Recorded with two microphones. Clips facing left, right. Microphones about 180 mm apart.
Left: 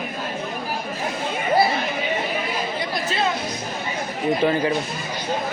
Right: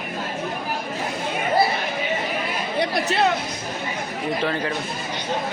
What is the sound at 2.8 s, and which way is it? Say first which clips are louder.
Chatter: right 7 dB; 70° right (ahead or behind).